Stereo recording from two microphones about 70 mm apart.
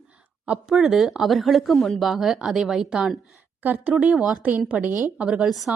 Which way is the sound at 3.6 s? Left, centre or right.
Right.